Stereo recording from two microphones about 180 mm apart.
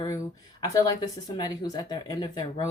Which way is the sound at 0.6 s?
20° left (ahead or behind).